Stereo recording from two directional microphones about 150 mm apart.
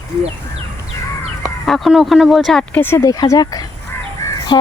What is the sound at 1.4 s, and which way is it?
Speech, centre (ahead or behind).